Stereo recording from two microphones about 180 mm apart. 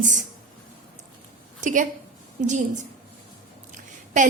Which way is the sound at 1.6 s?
45° right (ahead or behind).